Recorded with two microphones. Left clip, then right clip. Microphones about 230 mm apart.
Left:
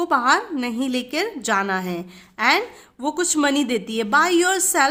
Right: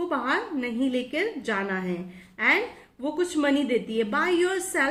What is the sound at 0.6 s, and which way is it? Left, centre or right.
A woman's voice, left.